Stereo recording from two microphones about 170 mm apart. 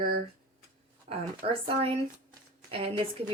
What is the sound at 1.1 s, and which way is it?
Speech, 45° right (ahead or behind).